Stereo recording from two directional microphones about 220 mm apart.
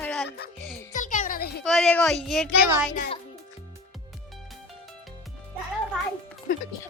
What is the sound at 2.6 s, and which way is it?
Speech, 10° right (ahead or behind).